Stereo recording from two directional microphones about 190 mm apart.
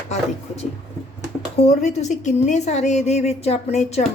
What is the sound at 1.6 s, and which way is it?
A woman's voice, 35° left (ahead or behind).